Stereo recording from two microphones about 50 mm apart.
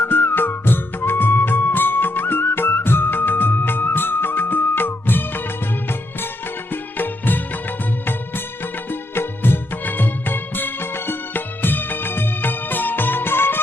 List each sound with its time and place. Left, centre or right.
0.0 s music: left
6.7 s music: left
8.9 s music: left